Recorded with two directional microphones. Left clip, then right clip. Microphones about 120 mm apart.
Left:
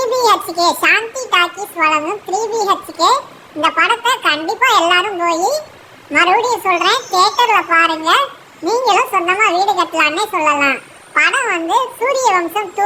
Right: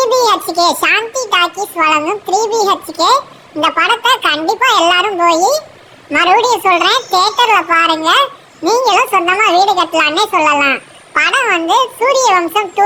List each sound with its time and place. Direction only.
0.0 s a child's voice: 25° right (ahead or behind)